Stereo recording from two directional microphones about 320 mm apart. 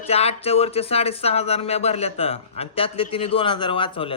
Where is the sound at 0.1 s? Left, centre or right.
Centre.